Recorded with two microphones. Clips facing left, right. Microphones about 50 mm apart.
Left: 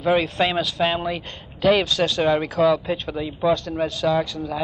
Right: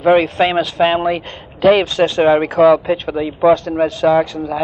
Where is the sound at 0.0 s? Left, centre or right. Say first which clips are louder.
Right 7 dB; right.